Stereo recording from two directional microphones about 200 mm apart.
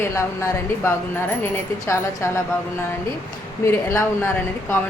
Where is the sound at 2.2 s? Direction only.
10° left (ahead or behind).